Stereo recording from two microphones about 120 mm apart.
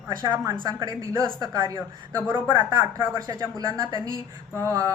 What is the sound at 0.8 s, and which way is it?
A man's voice, 30° right (ahead or behind).